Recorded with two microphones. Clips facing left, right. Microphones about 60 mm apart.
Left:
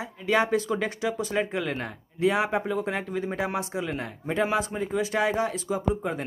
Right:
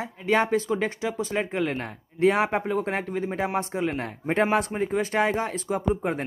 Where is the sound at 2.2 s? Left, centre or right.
Right.